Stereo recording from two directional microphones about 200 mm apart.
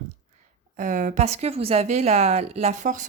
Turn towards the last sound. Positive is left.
turn(degrees=-40)  # may be behind; listen again after turning